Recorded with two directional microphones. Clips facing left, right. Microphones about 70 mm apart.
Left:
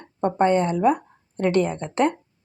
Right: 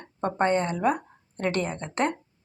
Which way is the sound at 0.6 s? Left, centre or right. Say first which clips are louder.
Left 5 dB; left.